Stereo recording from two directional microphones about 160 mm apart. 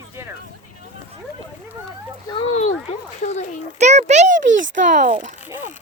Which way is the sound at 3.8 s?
45° right (ahead or behind).